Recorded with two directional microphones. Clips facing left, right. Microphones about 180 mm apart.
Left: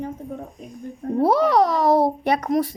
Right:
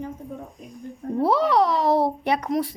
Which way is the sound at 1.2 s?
45° left (ahead or behind).